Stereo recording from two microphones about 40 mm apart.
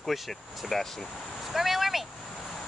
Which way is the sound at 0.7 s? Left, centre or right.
Centre.